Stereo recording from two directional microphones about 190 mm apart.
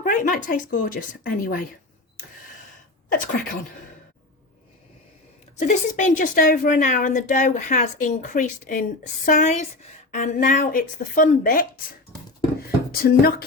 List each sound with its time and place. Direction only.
0.0 s a woman's voice: 45° left (ahead or behind)
3.1 s a woman's voice: 50° left (ahead or behind)
5.5 s a woman's voice: 40° left (ahead or behind)
12.9 s a woman's voice: 50° left (ahead or behind)